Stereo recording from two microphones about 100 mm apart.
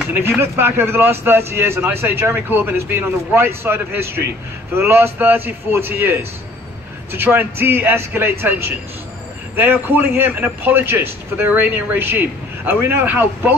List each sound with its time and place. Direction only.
0.0 s speech: 20° right (ahead or behind)